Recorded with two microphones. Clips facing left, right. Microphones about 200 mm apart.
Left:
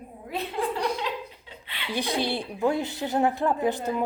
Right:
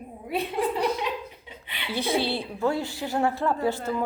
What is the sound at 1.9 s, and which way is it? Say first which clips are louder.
A woman's voice: right 1 dB; 15° left (ahead or behind).